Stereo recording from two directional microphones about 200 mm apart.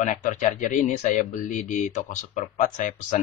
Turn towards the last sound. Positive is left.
turn(degrees=40)  # may be behind; listen again after turning